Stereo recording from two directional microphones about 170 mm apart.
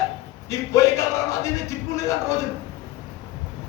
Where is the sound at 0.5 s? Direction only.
20° left (ahead or behind).